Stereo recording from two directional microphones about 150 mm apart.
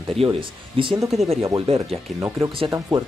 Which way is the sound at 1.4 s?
20° right (ahead or behind).